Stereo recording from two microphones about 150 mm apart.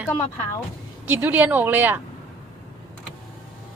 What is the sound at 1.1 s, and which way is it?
Speech, 10° right (ahead or behind).